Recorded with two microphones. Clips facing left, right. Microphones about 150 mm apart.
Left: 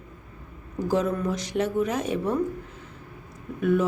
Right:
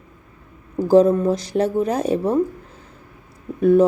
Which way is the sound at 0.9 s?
30° right (ahead or behind).